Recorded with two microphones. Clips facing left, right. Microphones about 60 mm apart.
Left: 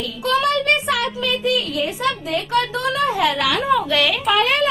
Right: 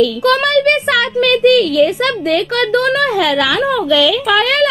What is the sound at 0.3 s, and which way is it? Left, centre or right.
A child's voice, right.